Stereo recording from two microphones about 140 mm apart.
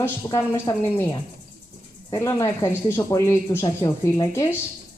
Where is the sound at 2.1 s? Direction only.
25° left (ahead or behind).